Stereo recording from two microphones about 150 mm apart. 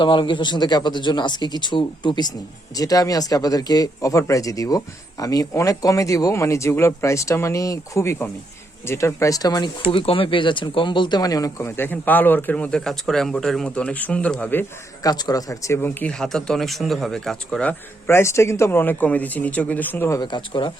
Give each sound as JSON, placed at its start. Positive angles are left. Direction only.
{"t": 0.0, "sound": "speech", "side_deg": 35}
{"t": 15.0, "sound": "speech", "side_deg": 25}